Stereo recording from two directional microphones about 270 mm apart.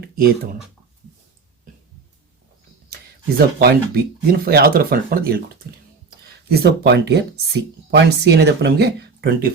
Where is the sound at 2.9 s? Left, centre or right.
Right.